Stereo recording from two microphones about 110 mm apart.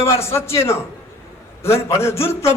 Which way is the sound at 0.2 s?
25° left (ahead or behind).